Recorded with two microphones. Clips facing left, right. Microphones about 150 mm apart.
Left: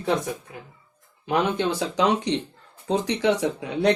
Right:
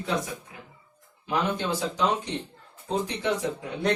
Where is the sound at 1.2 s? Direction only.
65° left (ahead or behind).